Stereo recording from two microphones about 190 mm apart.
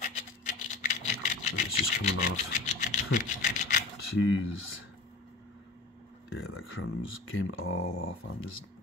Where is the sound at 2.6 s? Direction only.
40° left (ahead or behind).